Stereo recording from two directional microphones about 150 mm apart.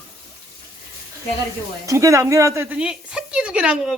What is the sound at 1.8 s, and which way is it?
A woman's voice, 20° right (ahead or behind).